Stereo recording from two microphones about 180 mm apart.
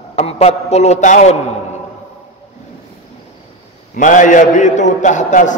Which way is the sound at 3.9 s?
45° left (ahead or behind).